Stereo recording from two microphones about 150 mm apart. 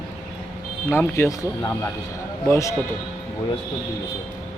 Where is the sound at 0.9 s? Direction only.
15° left (ahead or behind).